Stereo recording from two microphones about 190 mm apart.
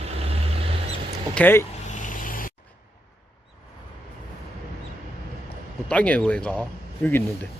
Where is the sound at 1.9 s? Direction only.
45° left (ahead or behind).